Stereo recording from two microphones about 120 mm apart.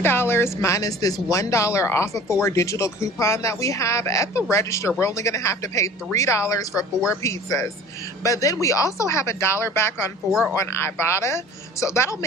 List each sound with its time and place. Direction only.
0.0 s speech: 20° left (ahead or behind)